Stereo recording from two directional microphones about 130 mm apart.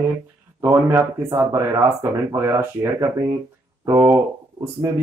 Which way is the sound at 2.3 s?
25° right (ahead or behind).